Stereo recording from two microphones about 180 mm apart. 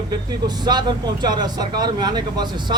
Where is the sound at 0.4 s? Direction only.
25° right (ahead or behind).